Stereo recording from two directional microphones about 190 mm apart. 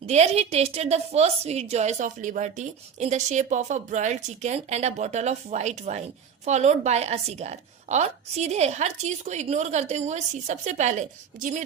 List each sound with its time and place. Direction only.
0.0 s a woman's voice: 35° right (ahead or behind)